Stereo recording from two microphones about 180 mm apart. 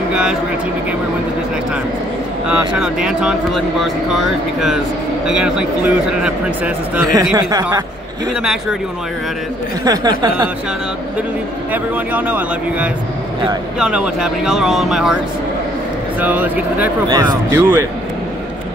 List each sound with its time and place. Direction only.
0.1 s a sound: 5° right (ahead or behind)
2.4 s speech: 5° right (ahead or behind)
7.3 s speech: 20° right (ahead or behind)
9.8 s speech: 20° right (ahead or behind)
11.7 s speech: 10° right (ahead or behind)
16.2 s speech: 10° right (ahead or behind)
17.1 s speech: 25° right (ahead or behind)
17.6 s speech: 15° right (ahead or behind)